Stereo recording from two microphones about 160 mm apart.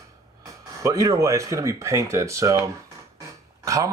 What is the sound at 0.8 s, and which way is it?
Speech, 20° right (ahead or behind).